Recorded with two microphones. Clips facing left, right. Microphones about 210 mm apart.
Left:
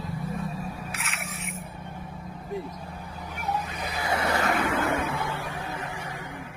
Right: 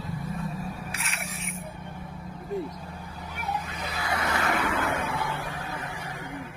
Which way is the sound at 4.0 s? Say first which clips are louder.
Left 3 dB; 25° left (ahead or behind).